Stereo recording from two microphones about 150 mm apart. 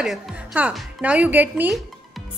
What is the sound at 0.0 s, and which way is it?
A woman's voice, centre (ahead or behind).